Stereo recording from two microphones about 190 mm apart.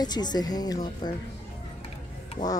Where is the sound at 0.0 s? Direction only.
20° left (ahead or behind).